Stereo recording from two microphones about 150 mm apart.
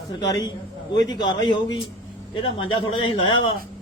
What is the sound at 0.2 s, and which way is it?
A man's voice, 25° left (ahead or behind).